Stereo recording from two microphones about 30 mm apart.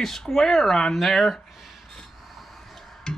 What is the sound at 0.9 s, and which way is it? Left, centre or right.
Speech, centre.